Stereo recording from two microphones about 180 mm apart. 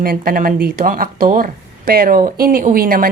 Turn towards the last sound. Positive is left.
turn(degrees=-55)  # may be behind; listen again after turning